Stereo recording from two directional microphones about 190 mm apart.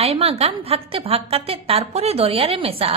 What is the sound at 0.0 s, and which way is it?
A woman's voice, 30° right (ahead or behind).